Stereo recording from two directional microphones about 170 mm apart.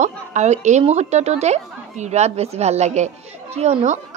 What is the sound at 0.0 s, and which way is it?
A woman's voice, 45° right (ahead or behind).